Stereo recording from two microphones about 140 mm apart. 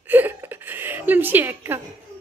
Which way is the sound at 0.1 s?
15° right (ahead or behind).